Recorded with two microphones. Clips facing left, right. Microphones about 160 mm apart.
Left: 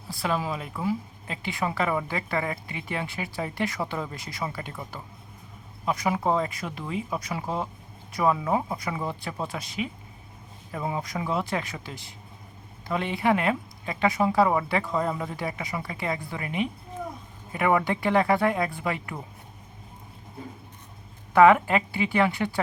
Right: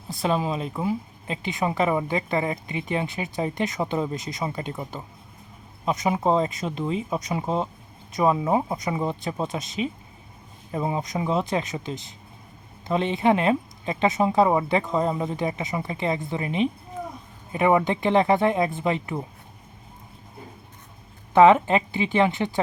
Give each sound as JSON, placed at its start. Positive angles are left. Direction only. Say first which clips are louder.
{"t": 0.1, "sound": "speech", "louder": "right 4 dB", "side_deg": -20}
{"t": 21.3, "sound": "speech", "louder": "right 2 dB", "side_deg": -20}